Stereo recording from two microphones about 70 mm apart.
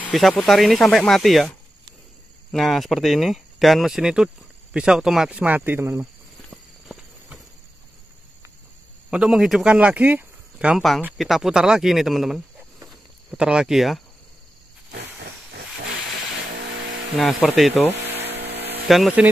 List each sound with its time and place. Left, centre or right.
0.3 s speech: centre
0.6 s speech: centre
2.5 s speech: centre
5.3 s speech: right
9.1 s speech: centre
9.8 s speech: right
11.1 s speech: centre
17.2 s speech: centre
18.9 s speech: centre